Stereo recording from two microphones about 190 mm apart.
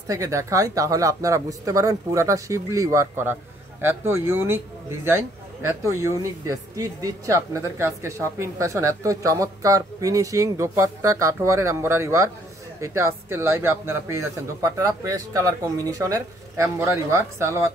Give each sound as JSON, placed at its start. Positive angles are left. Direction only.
{"t": 0.1, "sound": "a man's voice", "side_deg": -15}